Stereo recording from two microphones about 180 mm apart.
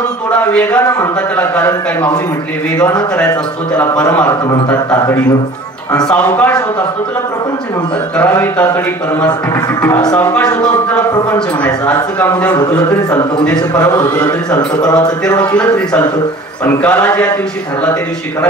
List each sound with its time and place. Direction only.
0.5 s a man's voice: 5° left (ahead or behind)
3.2 s a man's voice: 10° left (ahead or behind)
8.2 s a man's voice: 10° left (ahead or behind)
9.8 s a man's voice: 10° left (ahead or behind)
13.6 s speech: 15° left (ahead or behind)
16.6 s a man's voice: 10° left (ahead or behind)